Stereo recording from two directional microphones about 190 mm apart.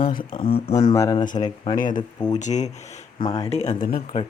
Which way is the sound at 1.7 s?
45° left (ahead or behind).